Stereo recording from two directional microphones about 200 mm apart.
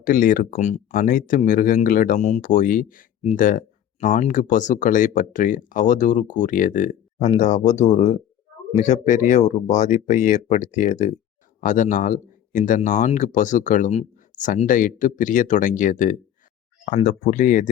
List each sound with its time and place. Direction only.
0.0 s speech: 45° left (ahead or behind)